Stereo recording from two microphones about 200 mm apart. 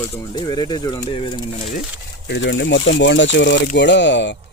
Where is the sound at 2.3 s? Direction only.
65° left (ahead or behind).